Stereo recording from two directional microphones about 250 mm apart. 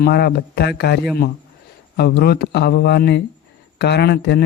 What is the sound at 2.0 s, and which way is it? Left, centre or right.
Speech, left.